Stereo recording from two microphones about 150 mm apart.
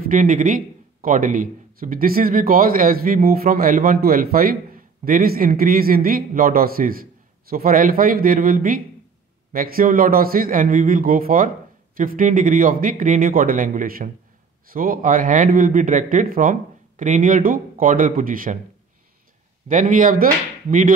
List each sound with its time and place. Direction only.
0.1 s a man's voice: 60° right (ahead or behind)
19.7 s a man's voice: 60° right (ahead or behind)